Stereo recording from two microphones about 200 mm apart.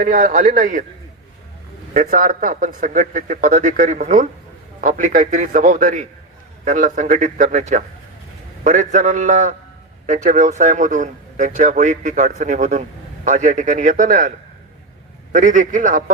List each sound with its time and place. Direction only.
0.0 s a man's voice: 40° right (ahead or behind)
1.9 s a man's voice: 40° right (ahead or behind)